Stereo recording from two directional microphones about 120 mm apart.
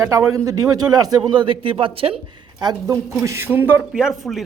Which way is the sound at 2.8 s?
25° right (ahead or behind).